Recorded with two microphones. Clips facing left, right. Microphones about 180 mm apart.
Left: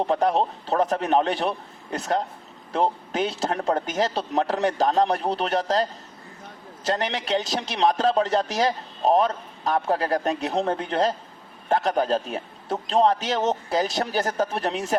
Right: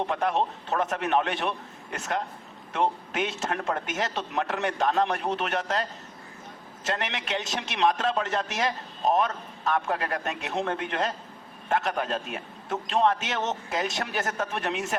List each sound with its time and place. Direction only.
0.0 s a man's voice: 35° left (ahead or behind)